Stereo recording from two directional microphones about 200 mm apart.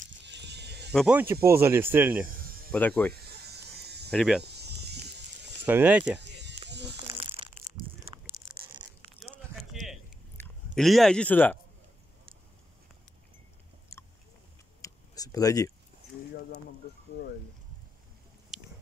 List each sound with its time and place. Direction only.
0.1 s music: 60° right (ahead or behind)
0.9 s speech: 5° right (ahead or behind)
2.7 s speech: 5° left (ahead or behind)
3.1 s insect: 55° right (ahead or behind)
4.1 s speech: centre (ahead or behind)
4.4 s insect: 55° right (ahead or behind)
5.7 s speech: 10° right (ahead or behind)
6.1 s a sound: 60° right (ahead or behind)
8.8 s zipper: 20° right (ahead or behind)
9.2 s a sound: centre (ahead or behind)
10.7 s speech: centre (ahead or behind)
14.8 s a sound: 15° left (ahead or behind)
18.5 s chewing: centre (ahead or behind)